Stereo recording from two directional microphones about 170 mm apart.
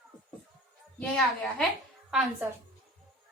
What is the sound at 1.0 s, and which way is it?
Speech, 5° left (ahead or behind).